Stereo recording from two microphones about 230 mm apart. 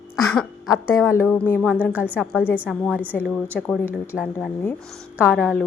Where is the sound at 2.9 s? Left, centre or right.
Centre.